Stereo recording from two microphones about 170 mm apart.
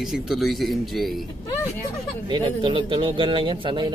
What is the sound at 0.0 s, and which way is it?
Speech, 5° right (ahead or behind).